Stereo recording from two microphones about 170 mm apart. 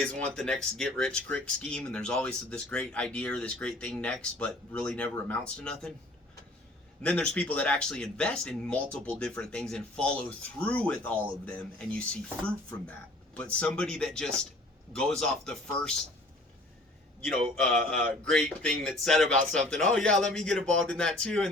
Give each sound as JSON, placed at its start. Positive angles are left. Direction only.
{"t": 0.0, "sound": "speech", "side_deg": 5}
{"t": 7.0, "sound": "speech", "side_deg": 5}
{"t": 17.2, "sound": "speech", "side_deg": 5}